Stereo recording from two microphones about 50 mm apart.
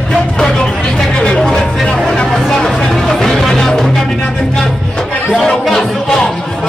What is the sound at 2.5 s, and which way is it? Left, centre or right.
Music, centre.